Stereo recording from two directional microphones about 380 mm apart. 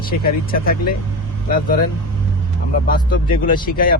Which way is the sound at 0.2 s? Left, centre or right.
Left.